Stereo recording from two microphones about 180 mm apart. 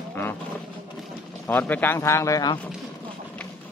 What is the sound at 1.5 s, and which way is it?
Speech, 10° left (ahead or behind).